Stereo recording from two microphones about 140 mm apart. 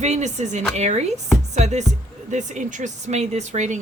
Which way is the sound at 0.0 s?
55° right (ahead or behind).